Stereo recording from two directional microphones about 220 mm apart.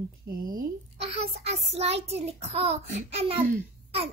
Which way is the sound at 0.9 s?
25° right (ahead or behind).